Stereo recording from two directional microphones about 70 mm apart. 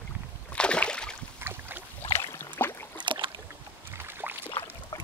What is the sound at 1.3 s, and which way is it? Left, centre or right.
Boat, right.